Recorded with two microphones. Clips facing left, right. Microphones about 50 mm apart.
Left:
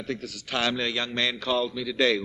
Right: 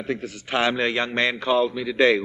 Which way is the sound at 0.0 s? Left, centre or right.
Right.